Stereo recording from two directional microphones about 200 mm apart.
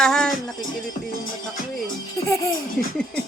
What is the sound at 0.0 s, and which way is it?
Music, 5° left (ahead or behind).